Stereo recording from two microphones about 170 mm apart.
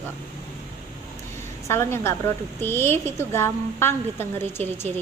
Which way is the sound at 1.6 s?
15° left (ahead or behind).